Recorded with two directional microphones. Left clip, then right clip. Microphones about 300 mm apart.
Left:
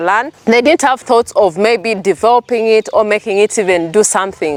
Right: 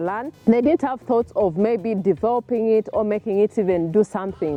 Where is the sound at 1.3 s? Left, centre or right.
Centre.